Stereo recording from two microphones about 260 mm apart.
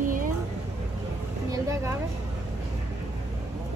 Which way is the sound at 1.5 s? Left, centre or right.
Centre.